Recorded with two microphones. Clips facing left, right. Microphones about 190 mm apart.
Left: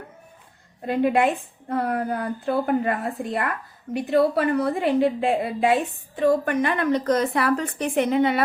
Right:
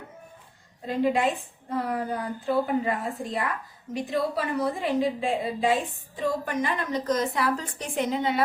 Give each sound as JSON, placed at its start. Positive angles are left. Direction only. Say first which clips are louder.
{"t": 0.9, "sound": "a woman's voice", "louder": "left 4 dB", "side_deg": 60}